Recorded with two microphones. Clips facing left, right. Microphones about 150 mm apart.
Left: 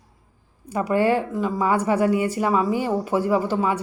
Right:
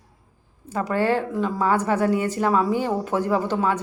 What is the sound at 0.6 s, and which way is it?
Speech, 10° left (ahead or behind).